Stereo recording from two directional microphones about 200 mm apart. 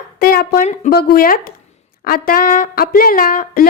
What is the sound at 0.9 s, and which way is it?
Speech, 45° left (ahead or behind).